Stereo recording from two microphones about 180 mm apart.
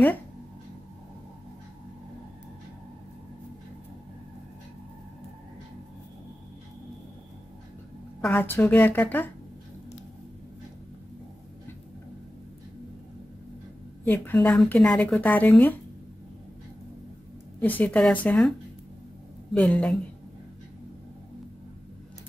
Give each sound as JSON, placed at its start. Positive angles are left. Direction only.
{"t": 8.2, "sound": "speech", "side_deg": 10}
{"t": 14.0, "sound": "speech", "side_deg": 10}
{"t": 17.6, "sound": "speech", "side_deg": 10}
{"t": 19.5, "sound": "speech", "side_deg": 5}